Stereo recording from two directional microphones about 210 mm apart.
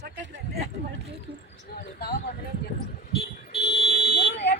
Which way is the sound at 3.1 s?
50° left (ahead or behind).